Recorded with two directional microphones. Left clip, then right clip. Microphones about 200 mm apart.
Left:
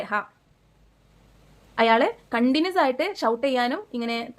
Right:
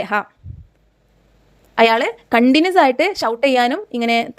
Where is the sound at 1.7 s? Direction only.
40° right (ahead or behind).